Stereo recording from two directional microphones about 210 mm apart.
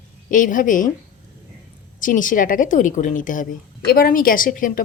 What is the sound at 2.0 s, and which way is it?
A woman's voice, 40° left (ahead or behind).